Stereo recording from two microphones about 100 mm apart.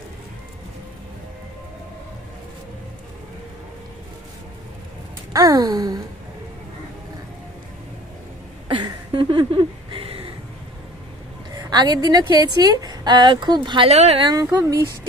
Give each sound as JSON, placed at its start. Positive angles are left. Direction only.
{"t": 5.3, "sound": "sigh", "side_deg": -40}
{"t": 8.8, "sound": "a sound", "side_deg": -55}
{"t": 11.5, "sound": "a woman's voice", "side_deg": -45}
{"t": 13.8, "sound": "speech", "side_deg": -90}
{"t": 14.2, "sound": "sigh", "side_deg": -35}
{"t": 14.6, "sound": "speech", "side_deg": -30}